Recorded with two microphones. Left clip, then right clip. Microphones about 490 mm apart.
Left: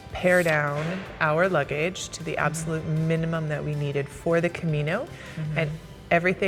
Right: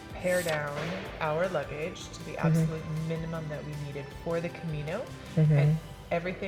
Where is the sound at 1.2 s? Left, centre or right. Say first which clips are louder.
Left 8 dB; left.